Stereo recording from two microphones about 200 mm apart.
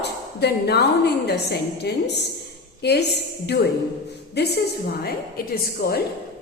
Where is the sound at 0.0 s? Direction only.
55° left (ahead or behind).